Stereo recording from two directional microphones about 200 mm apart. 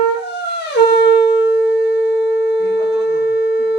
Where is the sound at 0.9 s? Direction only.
55° left (ahead or behind).